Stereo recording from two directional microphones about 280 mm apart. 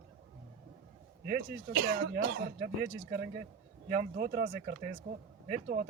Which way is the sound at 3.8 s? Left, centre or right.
Right.